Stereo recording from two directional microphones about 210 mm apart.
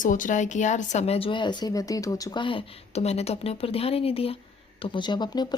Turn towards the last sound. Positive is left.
turn(degrees=20)  # may be behind; listen again after turning